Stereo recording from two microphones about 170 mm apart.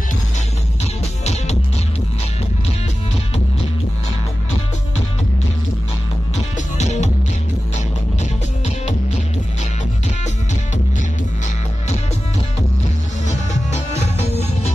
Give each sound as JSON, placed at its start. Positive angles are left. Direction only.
{"t": 1.2, "sound": "music", "side_deg": 40}
{"t": 6.3, "sound": "music", "side_deg": 40}
{"t": 8.2, "sound": "music", "side_deg": 40}
{"t": 13.3, "sound": "music", "side_deg": 45}